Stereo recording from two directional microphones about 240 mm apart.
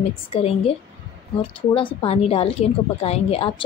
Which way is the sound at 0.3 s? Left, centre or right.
Left.